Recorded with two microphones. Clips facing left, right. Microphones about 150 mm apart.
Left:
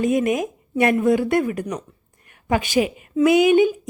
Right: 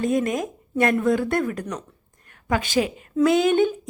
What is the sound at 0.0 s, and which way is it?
A woman's voice, 15° left (ahead or behind).